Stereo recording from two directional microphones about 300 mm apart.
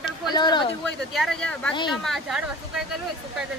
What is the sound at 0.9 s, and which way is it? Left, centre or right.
Speech, centre.